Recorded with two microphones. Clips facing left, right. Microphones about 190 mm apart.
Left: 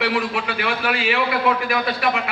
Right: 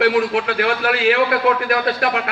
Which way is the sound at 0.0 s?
60° right (ahead or behind).